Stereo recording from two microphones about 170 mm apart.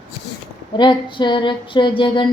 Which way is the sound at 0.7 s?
25° left (ahead or behind).